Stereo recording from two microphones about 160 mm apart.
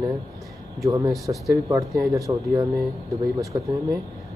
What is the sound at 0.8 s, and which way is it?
Speech, 20° right (ahead or behind).